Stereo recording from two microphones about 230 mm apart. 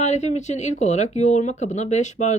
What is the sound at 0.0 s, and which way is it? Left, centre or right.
Speech, left.